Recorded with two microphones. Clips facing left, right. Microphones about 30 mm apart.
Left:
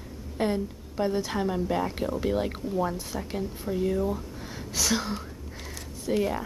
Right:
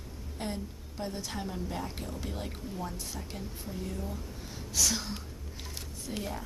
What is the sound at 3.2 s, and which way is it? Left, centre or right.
Speech, left.